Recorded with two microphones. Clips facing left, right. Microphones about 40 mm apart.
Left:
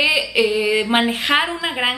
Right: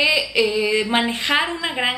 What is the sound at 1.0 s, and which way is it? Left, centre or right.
Speech, centre.